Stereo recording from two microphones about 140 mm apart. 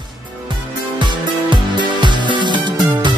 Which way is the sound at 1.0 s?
35° right (ahead or behind).